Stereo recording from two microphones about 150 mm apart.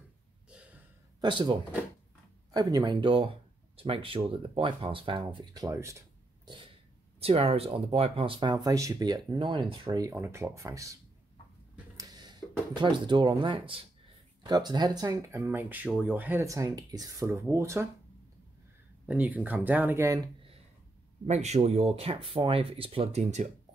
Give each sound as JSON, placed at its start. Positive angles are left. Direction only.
{"t": 0.5, "sound": "a sound", "side_deg": -10}
{"t": 1.2, "sound": "speech", "side_deg": -30}
{"t": 7.2, "sound": "speech", "side_deg": -40}
{"t": 9.8, "sound": "speech", "side_deg": -20}
{"t": 12.0, "sound": "speech", "side_deg": -25}
{"t": 19.0, "sound": "speech", "side_deg": -10}
{"t": 21.3, "sound": "speech", "side_deg": -50}